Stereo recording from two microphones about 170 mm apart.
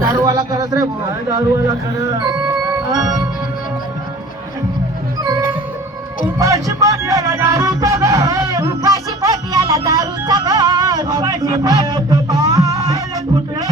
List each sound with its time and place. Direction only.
0.3 s speech: 20° right (ahead or behind)
6.4 s music: 20° right (ahead or behind)